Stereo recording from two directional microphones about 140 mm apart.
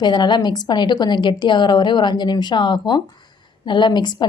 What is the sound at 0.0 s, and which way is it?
A woman's voice, 30° left (ahead or behind).